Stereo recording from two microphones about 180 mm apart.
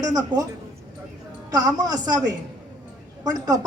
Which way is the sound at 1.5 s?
20° right (ahead or behind).